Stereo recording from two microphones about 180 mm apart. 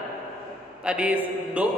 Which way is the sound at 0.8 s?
5° right (ahead or behind).